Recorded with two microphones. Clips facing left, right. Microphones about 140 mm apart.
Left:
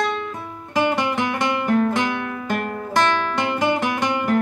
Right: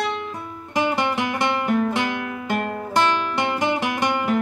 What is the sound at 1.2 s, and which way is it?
Music, 10° right (ahead or behind).